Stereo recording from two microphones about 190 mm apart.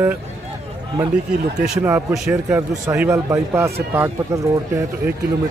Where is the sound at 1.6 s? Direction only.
10° right (ahead or behind).